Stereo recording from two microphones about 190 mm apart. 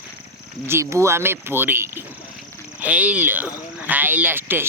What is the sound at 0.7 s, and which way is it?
Speech, 15° right (ahead or behind).